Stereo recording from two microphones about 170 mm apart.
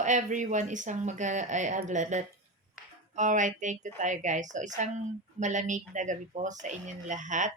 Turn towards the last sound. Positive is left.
turn(degrees=-45)  # may be behind; listen again after turning